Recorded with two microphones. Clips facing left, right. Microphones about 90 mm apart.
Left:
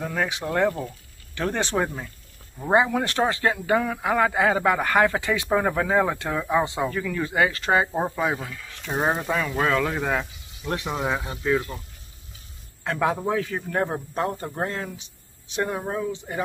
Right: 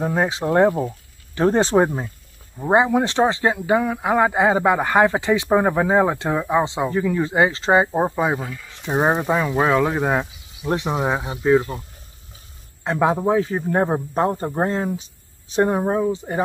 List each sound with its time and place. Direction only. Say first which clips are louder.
0.0 s speech: right 6 dB; 30° right (ahead or behind)
2.6 s speech: right 4 dB; 20° right (ahead or behind)
8.4 s speech: right 5 dB; 5° right (ahead or behind)
8.7 s speech: right 5 dB; 20° right (ahead or behind)
12.8 s speech: right 5 dB; 25° right (ahead or behind)